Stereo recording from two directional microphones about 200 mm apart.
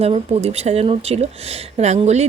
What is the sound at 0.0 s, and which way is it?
Speech, 30° right (ahead or behind).